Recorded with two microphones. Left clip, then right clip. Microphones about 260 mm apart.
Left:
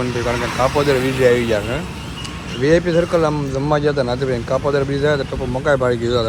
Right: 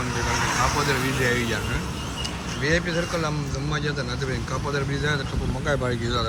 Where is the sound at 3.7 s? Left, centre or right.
Centre.